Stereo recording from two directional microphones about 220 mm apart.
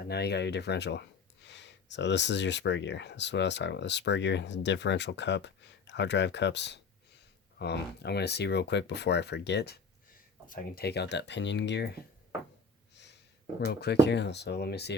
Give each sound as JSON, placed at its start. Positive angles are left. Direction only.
{"t": 0.1, "sound": "speech", "side_deg": 50}
{"t": 13.7, "sound": "speech", "side_deg": 50}